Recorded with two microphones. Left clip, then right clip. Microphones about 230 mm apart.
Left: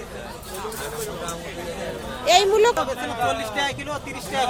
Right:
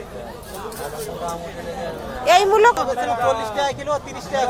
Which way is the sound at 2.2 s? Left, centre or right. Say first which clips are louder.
Right 3 dB; centre.